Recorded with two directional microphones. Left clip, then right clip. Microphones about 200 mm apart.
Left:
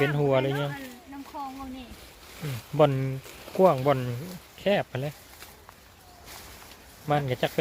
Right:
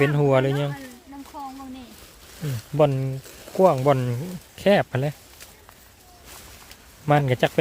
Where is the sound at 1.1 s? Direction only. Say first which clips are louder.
Right 2 dB; 20° right (ahead or behind).